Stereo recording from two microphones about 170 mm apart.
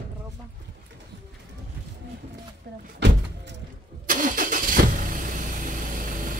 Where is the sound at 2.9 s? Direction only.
90° right.